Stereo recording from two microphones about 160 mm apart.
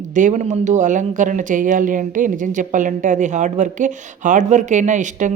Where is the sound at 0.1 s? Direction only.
50° right (ahead or behind).